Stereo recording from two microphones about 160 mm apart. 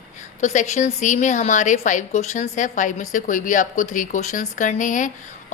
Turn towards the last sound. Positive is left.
turn(degrees=50)  # may be behind; listen again after turning